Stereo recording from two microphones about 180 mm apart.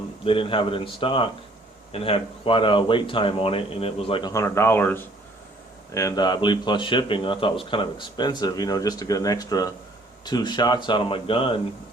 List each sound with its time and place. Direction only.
0.3 s speech: 30° left (ahead or behind)